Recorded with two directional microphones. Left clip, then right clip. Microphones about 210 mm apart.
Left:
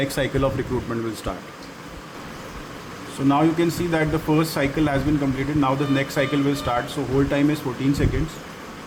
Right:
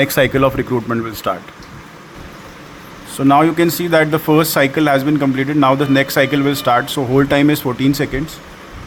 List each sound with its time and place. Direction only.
0.0 s speech: 35° right (ahead or behind)
3.2 s speech: 40° right (ahead or behind)